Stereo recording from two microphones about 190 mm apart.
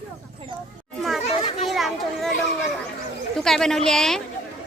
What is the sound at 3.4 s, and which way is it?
Speech, centre (ahead or behind).